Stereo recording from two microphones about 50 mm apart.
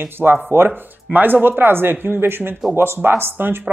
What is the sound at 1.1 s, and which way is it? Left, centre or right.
Speech, right.